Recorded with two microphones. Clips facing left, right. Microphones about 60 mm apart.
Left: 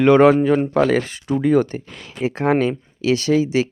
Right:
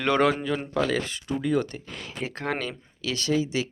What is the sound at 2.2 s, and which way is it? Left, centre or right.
Speech, centre.